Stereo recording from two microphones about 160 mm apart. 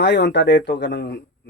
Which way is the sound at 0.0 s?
90° left.